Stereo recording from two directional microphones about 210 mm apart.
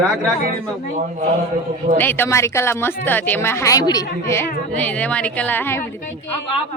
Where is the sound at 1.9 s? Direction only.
10° left (ahead or behind).